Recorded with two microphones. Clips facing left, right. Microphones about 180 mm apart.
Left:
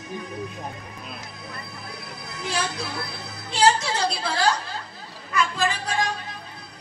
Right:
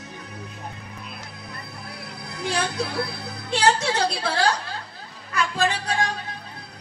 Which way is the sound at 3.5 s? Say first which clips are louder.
Even; 60° right (ahead or behind).